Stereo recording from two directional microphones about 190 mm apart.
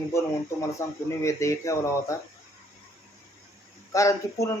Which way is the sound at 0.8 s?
15° left (ahead or behind).